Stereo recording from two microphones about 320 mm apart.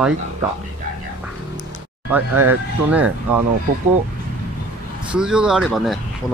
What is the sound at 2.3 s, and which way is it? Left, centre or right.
Speech, right.